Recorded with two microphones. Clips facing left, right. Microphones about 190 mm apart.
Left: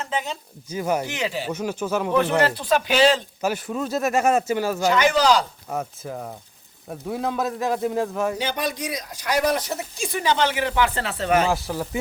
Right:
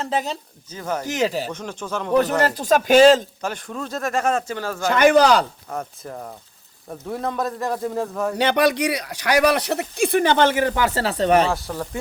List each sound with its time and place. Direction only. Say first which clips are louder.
0.0 s speech: right 4 dB; 35° right (ahead or behind)
0.7 s speech: left 3 dB; 10° left (ahead or behind)
1.0 s speech: right 5 dB; 40° right (ahead or behind)
1.5 s speech: left 4 dB; 10° left (ahead or behind)
2.4 s speech: right 2 dB; 45° right (ahead or behind)
3.4 s speech: left 4 dB; 5° left (ahead or behind)
4.9 s speech: right 5 dB; 55° right (ahead or behind)
5.7 s a man's voice: left 2 dB; centre (ahead or behind)
8.4 s speech: right 8 dB; 70° right (ahead or behind); by 11.4 s 35° right (ahead or behind)
11.5 s a man's voice: left 1 dB; centre (ahead or behind)